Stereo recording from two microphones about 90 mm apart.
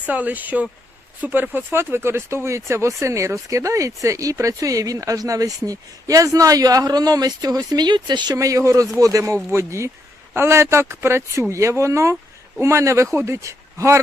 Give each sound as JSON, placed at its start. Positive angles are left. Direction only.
{"t": 0.0, "sound": "speech", "side_deg": -15}
{"t": 8.4, "sound": "speech", "side_deg": -35}